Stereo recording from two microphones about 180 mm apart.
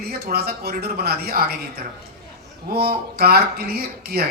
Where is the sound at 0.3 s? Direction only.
60° right (ahead or behind).